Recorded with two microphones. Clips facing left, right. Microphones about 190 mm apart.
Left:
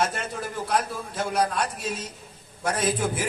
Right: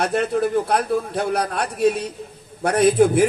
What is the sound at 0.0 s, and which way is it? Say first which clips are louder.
A man's voice: right 9 dB; 65° right (ahead or behind).